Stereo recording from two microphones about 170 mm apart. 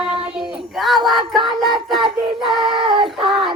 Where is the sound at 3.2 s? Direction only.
30° right (ahead or behind).